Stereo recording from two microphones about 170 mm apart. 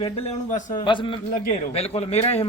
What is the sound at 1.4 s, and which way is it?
A man's voice, 40° left (ahead or behind).